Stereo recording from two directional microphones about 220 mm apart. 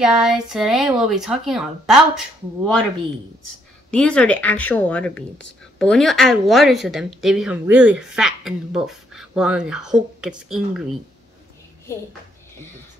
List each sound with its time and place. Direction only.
0.0 s speech: 5° right (ahead or behind)
3.9 s speech: 5° left (ahead or behind)